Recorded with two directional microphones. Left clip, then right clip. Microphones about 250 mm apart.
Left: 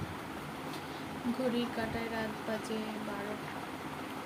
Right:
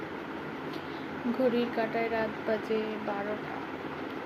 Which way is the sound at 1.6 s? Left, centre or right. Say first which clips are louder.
Right 6 dB; centre.